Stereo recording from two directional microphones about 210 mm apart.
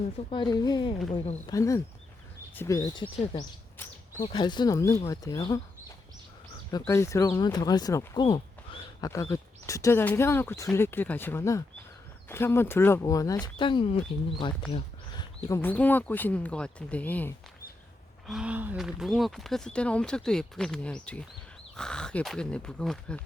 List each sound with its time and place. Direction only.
0.2 s speech: 25° left (ahead or behind)
1.1 s speech: 30° left (ahead or behind)
1.5 s speech: 15° left (ahead or behind)
4.3 s speech: 20° left (ahead or behind)
6.7 s speech: 15° left (ahead or behind)
18.3 s speech: 5° right (ahead or behind)